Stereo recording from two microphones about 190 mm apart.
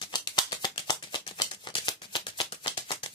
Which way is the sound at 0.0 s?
20° left (ahead or behind).